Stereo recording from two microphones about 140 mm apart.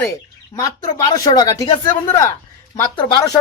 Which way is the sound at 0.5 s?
25° left (ahead or behind).